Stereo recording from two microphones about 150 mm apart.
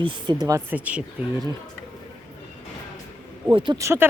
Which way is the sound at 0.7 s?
10° right (ahead or behind).